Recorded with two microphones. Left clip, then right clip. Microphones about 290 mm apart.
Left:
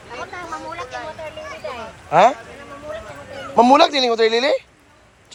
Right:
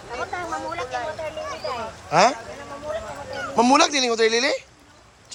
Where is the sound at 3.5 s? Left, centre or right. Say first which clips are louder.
Left 5 dB; centre.